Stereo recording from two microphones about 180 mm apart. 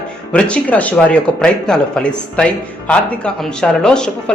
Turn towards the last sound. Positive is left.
turn(degrees=5)  # may be behind; listen again after turning